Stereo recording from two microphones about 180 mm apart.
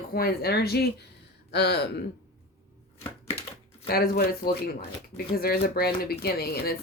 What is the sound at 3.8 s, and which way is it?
Speech, 60° left (ahead or behind).